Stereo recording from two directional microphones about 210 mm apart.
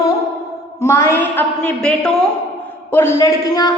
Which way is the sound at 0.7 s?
15° left (ahead or behind).